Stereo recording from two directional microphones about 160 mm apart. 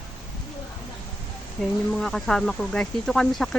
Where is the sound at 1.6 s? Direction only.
Centre (ahead or behind).